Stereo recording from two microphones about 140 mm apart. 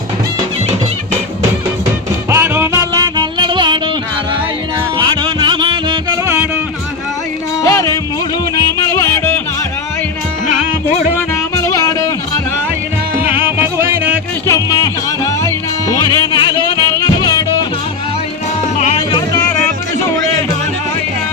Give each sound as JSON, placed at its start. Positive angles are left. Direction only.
{"t": 2.3, "sound": "music", "side_deg": -15}
{"t": 4.9, "sound": "music", "side_deg": -35}
{"t": 7.6, "sound": "music", "side_deg": 25}
{"t": 9.0, "sound": "music", "side_deg": 15}
{"t": 11.3, "sound": "music", "side_deg": 20}
{"t": 13.6, "sound": "music", "side_deg": -15}
{"t": 14.4, "sound": "music", "side_deg": 25}
{"t": 19.1, "sound": "music", "side_deg": 25}